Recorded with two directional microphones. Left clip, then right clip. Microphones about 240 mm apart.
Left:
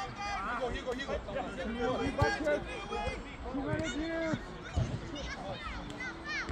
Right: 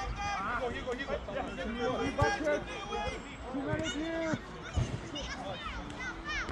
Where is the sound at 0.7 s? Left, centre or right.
Left.